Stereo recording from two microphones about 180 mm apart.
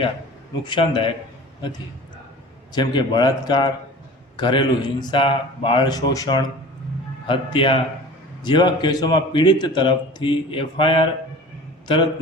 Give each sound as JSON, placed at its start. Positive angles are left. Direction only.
{"t": 0.6, "sound": "a man's voice", "side_deg": 25}
{"t": 2.7, "sound": "a man's voice", "side_deg": 25}